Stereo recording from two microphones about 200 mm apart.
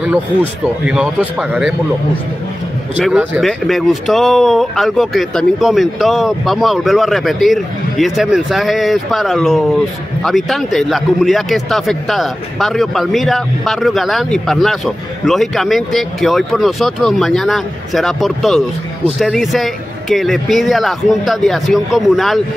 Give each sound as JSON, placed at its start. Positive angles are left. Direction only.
{"t": 0.8, "sound": "a man's voice", "side_deg": -5}
{"t": 3.0, "sound": "a man's voice", "side_deg": -5}